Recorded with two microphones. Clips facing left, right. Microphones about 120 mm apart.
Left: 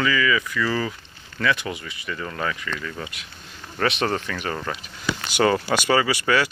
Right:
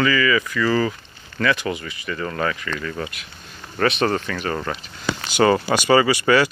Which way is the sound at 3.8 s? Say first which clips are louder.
Right 3 dB; 20° left (ahead or behind).